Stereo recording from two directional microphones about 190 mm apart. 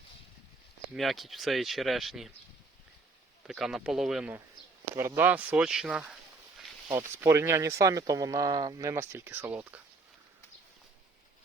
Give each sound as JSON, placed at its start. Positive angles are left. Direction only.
{"t": 0.9, "sound": "speech", "side_deg": 0}
{"t": 3.4, "sound": "speech", "side_deg": 0}
{"t": 7.2, "sound": "speech", "side_deg": -15}